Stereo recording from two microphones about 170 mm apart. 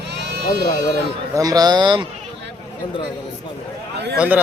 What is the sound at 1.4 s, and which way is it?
Speech, 20° right (ahead or behind).